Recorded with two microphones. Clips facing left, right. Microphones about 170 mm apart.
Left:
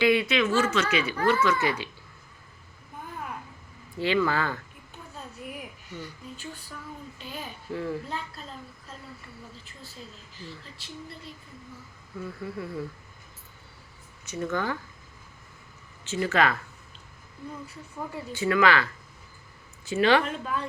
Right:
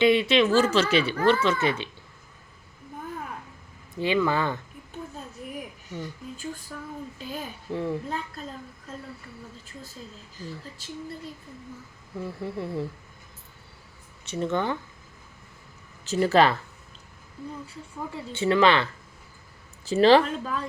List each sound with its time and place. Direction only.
0.0 s speech: 25° right (ahead or behind)
3.9 s speech: 15° right (ahead or behind)
7.7 s speech: 20° right (ahead or behind)
10.4 s a sound: 45° right (ahead or behind)
12.2 s speech: 25° right (ahead or behind)
14.3 s speech: 25° right (ahead or behind)
16.0 s speech: 40° right (ahead or behind)
18.1 s speech: 25° right (ahead or behind)
19.9 s speech: 35° right (ahead or behind)